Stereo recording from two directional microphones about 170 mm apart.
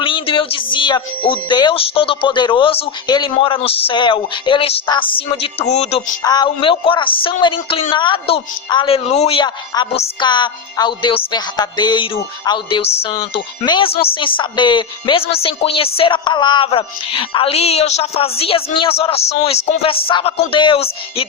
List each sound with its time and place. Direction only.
0.0 s a sound: 30° left (ahead or behind)
1.3 s a woman's voice: 25° left (ahead or behind)
6.2 s a woman's voice: 25° left (ahead or behind)